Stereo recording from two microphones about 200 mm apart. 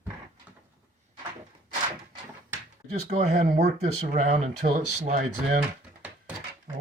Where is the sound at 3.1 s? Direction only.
35° right (ahead or behind).